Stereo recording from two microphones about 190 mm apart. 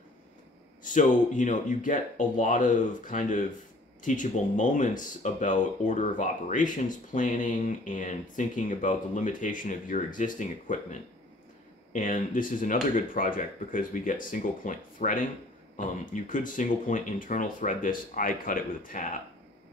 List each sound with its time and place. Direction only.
0.8 s speech: 40° left (ahead or behind)